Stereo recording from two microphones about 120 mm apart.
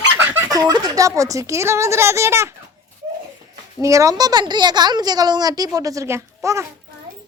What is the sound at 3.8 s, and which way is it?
A woman's voice, 25° right (ahead or behind).